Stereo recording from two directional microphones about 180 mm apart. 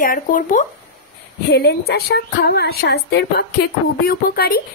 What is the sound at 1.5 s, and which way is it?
A woman's voice, 65° left (ahead or behind).